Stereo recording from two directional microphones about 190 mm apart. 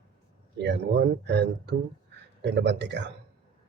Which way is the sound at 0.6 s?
65° right (ahead or behind).